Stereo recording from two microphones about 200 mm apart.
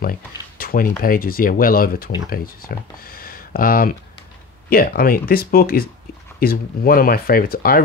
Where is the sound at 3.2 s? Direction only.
45° left (ahead or behind).